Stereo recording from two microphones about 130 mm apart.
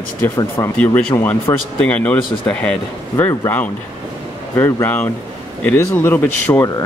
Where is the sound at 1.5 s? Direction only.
25° left (ahead or behind).